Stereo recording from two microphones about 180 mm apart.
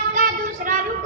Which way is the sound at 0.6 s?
55° right (ahead or behind).